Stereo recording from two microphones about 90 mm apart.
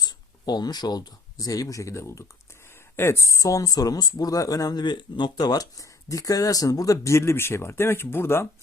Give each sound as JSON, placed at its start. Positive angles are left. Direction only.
{"t": 0.0, "sound": "speech", "side_deg": 50}